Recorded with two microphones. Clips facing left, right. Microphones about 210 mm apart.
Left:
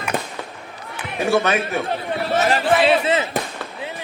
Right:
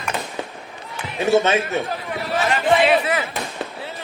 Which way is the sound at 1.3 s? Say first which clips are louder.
Right 2 dB; 20° right (ahead or behind).